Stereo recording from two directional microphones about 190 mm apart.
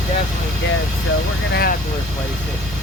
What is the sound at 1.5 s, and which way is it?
Vehicle, 55° left (ahead or behind).